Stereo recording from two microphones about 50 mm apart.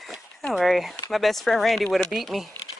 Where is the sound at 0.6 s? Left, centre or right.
Centre.